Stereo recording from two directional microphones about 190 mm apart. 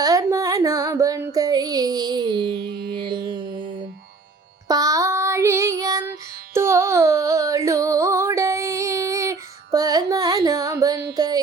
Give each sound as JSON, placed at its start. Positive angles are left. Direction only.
{"t": 0.0, "sound": "music", "side_deg": -20}
{"t": 4.7, "sound": "child singing", "side_deg": -20}
{"t": 6.5, "sound": "music", "side_deg": -15}